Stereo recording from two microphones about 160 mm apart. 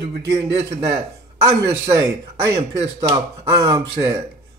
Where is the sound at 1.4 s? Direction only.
20° right (ahead or behind).